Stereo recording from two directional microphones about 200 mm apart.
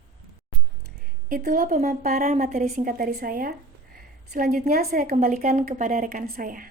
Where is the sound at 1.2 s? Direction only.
45° right (ahead or behind).